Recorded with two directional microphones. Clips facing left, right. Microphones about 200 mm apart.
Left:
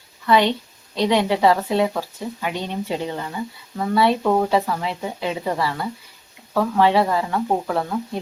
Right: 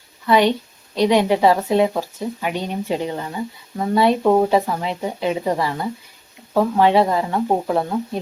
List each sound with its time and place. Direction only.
0.3 s a woman's voice: 15° right (ahead or behind)